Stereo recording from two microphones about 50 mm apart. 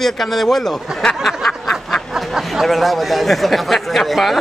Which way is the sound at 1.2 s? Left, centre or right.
Centre.